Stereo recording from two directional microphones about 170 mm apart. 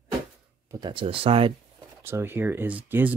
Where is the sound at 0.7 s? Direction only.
25° right (ahead or behind).